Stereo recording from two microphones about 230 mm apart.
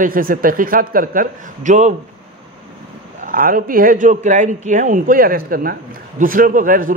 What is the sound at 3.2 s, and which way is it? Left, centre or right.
Speech, right.